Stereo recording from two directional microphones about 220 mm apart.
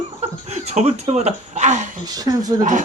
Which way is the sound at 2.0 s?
15° right (ahead or behind).